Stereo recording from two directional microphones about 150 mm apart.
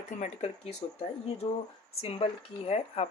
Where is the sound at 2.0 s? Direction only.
40° left (ahead or behind).